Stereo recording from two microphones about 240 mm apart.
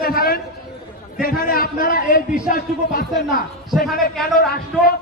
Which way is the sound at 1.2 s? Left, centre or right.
Left.